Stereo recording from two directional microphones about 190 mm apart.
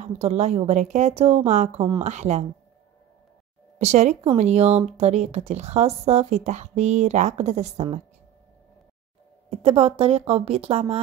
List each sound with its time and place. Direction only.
0.0 s a woman's voice: 35° right (ahead or behind)
3.7 s a woman's voice: 35° right (ahead or behind)
9.5 s speech: 30° right (ahead or behind)